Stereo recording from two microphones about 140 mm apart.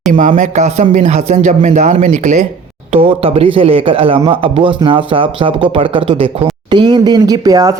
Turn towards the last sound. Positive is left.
turn(degrees=-25)  # may be behind; listen again after turning